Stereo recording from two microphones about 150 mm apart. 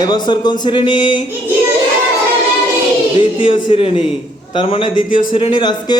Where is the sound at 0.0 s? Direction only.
30° left (ahead or behind).